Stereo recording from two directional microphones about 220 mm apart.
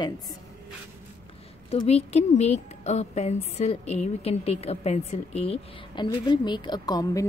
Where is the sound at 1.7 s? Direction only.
30° left (ahead or behind).